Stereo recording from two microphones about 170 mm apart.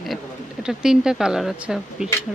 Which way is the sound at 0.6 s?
5° right (ahead or behind).